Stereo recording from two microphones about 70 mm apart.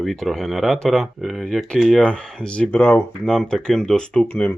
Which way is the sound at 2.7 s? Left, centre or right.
Left.